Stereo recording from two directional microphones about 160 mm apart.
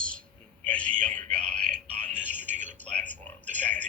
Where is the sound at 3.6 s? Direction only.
10° left (ahead or behind).